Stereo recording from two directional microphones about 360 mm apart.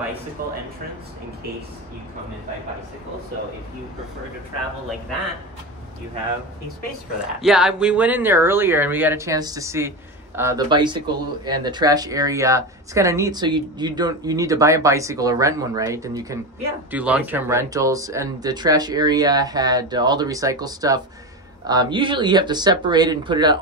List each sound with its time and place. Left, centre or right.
0.4 s speech: right
7.4 s speech: centre